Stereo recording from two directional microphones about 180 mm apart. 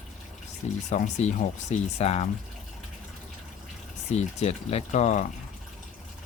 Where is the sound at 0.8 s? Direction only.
40° left (ahead or behind).